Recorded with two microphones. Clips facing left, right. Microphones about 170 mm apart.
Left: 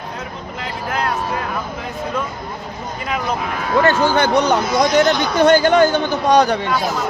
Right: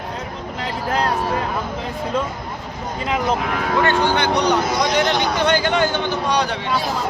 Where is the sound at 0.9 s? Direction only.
35° right (ahead or behind).